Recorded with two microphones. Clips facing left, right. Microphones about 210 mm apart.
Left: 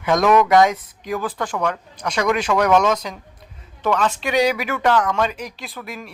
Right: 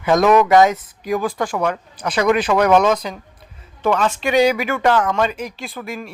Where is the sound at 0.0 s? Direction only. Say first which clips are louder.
Right 2 dB; 5° right (ahead or behind).